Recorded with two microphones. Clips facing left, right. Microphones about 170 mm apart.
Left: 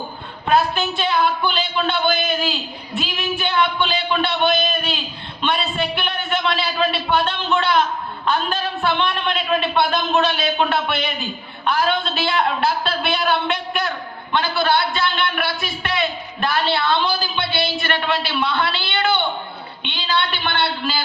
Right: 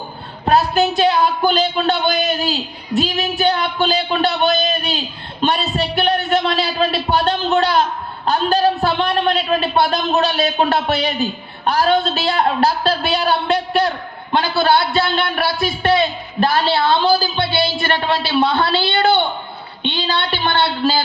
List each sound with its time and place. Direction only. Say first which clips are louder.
0.4 s a man's voice: right 4 dB; 40° right (ahead or behind)